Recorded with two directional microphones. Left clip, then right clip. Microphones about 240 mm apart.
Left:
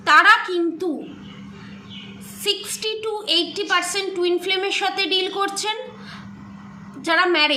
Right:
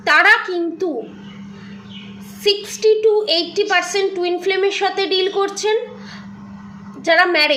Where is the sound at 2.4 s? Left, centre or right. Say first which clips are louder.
Right 7 dB; centre.